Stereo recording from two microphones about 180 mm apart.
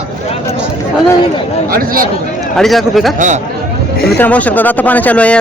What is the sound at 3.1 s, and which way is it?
Speech, 45° right (ahead or behind).